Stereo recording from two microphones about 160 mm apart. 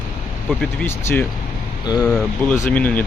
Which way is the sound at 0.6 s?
10° left (ahead or behind).